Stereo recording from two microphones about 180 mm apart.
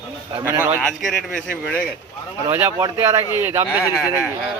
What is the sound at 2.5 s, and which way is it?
Speech, 15° right (ahead or behind).